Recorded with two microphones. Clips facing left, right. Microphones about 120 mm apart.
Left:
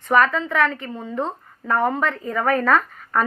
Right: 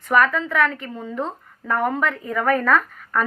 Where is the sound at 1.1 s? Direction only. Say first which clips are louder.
Left 2 dB; 20° left (ahead or behind).